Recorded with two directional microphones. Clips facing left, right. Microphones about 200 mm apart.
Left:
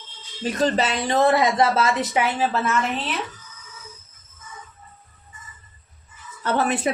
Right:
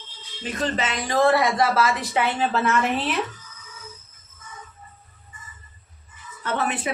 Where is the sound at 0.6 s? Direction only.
35° left (ahead or behind).